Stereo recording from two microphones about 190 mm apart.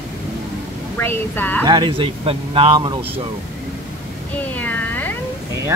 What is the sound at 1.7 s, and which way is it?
Speech, 25° right (ahead or behind).